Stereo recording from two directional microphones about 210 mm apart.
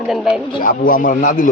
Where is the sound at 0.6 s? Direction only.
40° left (ahead or behind).